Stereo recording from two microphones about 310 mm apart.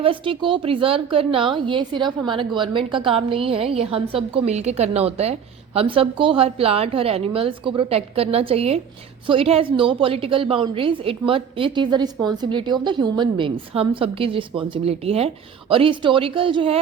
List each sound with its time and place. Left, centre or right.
0.0 s a woman's voice: centre